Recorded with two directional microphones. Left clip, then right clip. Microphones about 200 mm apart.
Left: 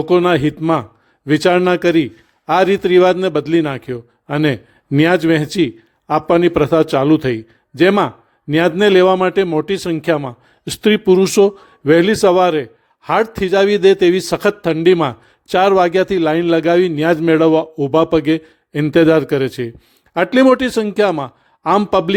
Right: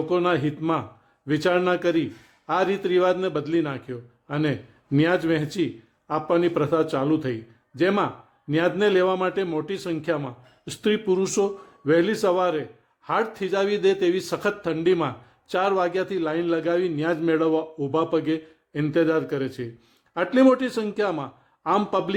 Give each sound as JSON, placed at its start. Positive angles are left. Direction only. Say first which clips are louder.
{"t": 0.0, "sound": "a man's voice", "louder": "left 9 dB", "side_deg": 40}